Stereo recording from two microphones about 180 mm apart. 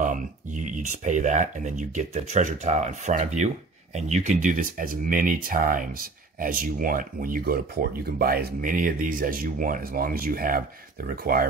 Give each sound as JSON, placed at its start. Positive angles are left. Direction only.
{"t": 0.0, "sound": "speech", "side_deg": -45}